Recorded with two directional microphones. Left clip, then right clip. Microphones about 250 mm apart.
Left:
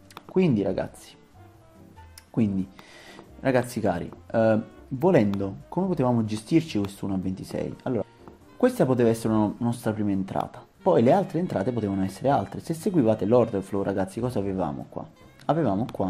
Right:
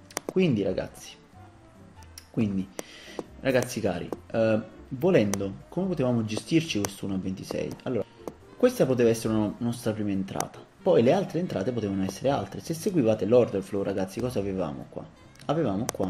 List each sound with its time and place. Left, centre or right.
0.4 s speech: centre
3.1 s speech: centre